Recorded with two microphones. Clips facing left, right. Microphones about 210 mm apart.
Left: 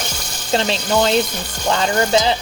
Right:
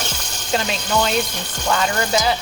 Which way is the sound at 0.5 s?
30° left (ahead or behind).